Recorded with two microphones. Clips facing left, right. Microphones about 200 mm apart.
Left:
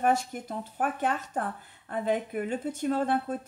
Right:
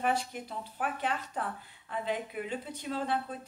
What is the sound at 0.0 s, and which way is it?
Speech, 45° left (ahead or behind).